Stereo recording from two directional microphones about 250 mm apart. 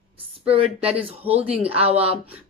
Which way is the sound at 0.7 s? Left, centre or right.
Centre.